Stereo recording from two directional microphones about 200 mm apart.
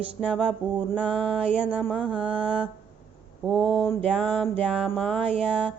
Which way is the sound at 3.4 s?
Centre (ahead or behind).